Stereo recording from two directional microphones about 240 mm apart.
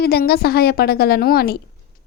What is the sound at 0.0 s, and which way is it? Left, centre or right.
Speech, left.